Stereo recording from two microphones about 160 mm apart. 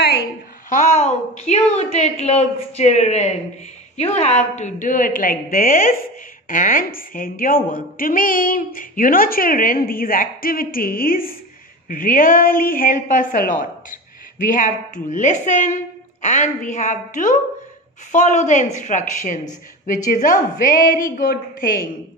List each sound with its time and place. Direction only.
0.7 s a woman's voice: 50° left (ahead or behind); by 21.8 s 65° left (ahead or behind)